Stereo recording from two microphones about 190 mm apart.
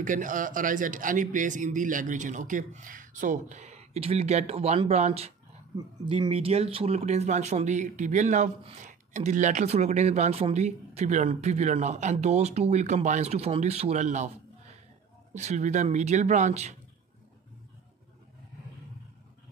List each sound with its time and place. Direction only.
0.0 s speech: 45° right (ahead or behind)
15.3 s speech: 40° right (ahead or behind)